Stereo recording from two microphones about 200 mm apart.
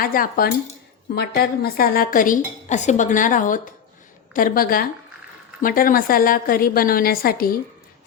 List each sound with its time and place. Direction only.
0.0 s a woman's voice: 45° left (ahead or behind)